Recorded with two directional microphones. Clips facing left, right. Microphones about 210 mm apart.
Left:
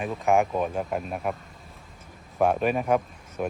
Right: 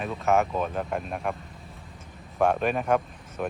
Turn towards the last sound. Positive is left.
turn(degrees=5)  # may be behind; listen again after turning